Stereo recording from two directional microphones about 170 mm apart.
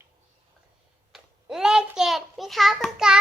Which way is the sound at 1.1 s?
5° right (ahead or behind).